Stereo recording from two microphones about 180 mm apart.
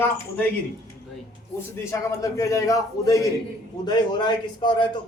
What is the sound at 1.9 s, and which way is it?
A man's voice, 20° left (ahead or behind).